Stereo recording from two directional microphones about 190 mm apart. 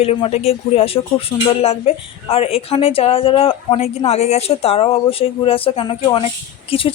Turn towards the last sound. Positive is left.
turn(degrees=30)  # may be behind; listen again after turning